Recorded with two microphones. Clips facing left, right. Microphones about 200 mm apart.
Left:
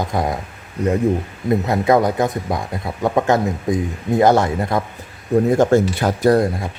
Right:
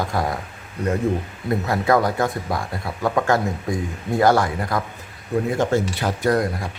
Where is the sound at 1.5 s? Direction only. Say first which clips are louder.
Left 4 dB; 20° left (ahead or behind).